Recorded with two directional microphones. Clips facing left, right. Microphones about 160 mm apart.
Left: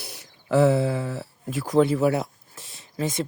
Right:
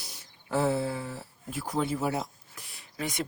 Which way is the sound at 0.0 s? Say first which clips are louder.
Left 7 dB; 65° left (ahead or behind).